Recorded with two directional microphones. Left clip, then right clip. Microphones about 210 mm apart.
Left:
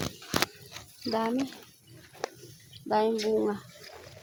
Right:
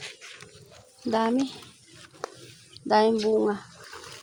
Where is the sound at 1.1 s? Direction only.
45° right (ahead or behind).